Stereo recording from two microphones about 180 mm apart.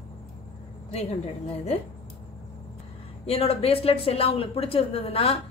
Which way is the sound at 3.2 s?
35° left (ahead or behind).